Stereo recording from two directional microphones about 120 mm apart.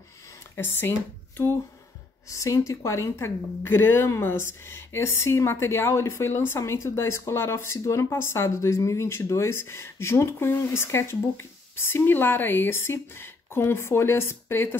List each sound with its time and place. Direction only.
0.6 s speech: 20° left (ahead or behind)